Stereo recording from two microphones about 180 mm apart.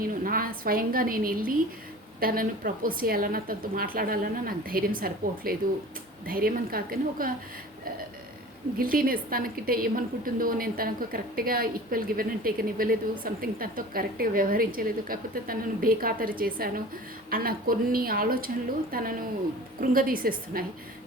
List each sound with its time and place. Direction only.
0.0 s a woman's voice: 50° right (ahead or behind)
8.8 s a woman's voice: 50° right (ahead or behind)